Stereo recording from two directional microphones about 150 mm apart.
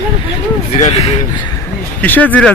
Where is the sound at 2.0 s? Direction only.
10° left (ahead or behind).